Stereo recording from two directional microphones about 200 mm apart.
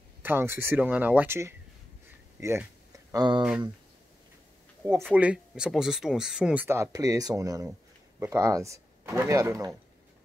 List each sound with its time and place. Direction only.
0.2 s speech: 10° right (ahead or behind)
5.1 s speech: 5° right (ahead or behind)